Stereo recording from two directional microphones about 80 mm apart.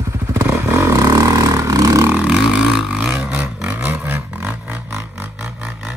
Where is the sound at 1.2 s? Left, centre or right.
Right.